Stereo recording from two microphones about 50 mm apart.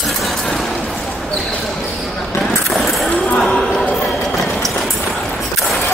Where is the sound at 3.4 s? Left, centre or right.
Centre.